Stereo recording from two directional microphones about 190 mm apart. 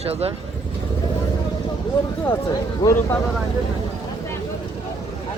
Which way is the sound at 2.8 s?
15° left (ahead or behind).